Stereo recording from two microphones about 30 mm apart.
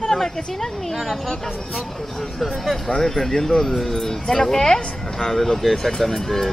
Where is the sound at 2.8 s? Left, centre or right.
Left.